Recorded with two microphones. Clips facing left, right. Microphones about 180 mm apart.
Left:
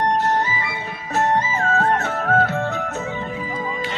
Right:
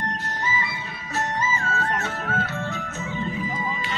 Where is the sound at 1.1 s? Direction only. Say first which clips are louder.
Left 7 dB; 55° left (ahead or behind).